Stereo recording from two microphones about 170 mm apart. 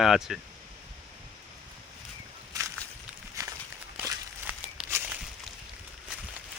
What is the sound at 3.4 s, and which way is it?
Walk, 20° right (ahead or behind).